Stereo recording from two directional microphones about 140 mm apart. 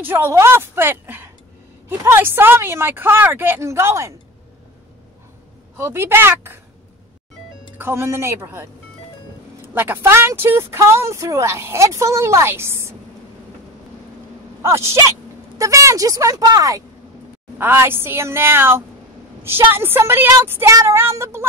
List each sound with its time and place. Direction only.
0.0 s speech: 15° right (ahead or behind)
5.8 s speech: 15° right (ahead or behind)
7.7 s a woman's voice: 15° right (ahead or behind)
9.8 s speech: 15° right (ahead or behind)
14.6 s speech: 20° right (ahead or behind)